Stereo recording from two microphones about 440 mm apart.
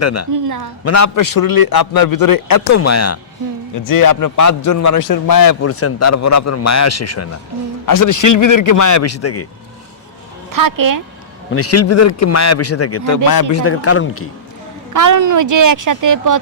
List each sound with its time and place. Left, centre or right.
0.0 s a man's voice: left
0.3 s speech: right
0.9 s a man's voice: left
3.8 s a man's voice: left
10.5 s speech: right
11.5 s a man's voice: left
13.2 s a man's voice: left
13.5 s a man's voice: left
14.9 s speech: right